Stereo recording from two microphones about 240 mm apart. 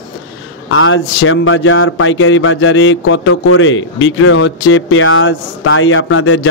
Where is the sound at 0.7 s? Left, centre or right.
Left.